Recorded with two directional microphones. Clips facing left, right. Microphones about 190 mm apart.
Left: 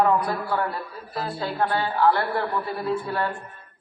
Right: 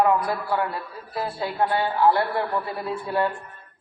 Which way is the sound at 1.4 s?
15° right (ahead or behind).